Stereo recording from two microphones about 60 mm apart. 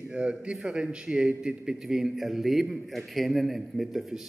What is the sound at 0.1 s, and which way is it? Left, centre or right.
A man's voice, centre.